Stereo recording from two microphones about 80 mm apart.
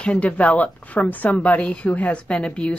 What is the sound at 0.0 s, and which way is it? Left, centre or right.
A woman's voice, centre.